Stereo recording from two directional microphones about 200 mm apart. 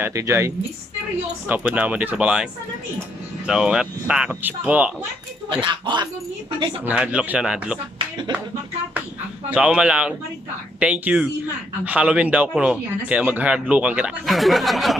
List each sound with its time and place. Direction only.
0.0 s speech: 15° right (ahead or behind)
1.5 s speech: 5° right (ahead or behind)
5.5 s speech: 25° right (ahead or behind)
6.8 s speech: 5° right (ahead or behind)